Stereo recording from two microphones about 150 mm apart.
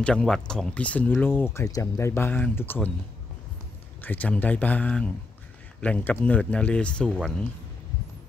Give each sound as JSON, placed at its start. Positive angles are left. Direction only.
{"t": 0.0, "sound": "speech", "side_deg": 5}
{"t": 4.0, "sound": "speech", "side_deg": 10}